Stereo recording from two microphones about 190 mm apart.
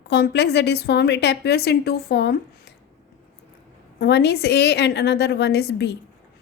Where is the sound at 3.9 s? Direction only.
60° left (ahead or behind).